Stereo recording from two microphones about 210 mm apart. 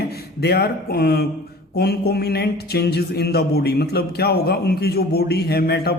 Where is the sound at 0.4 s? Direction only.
50° left (ahead or behind).